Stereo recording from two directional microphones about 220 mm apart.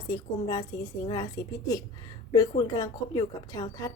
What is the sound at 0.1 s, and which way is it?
A woman's voice, 15° left (ahead or behind).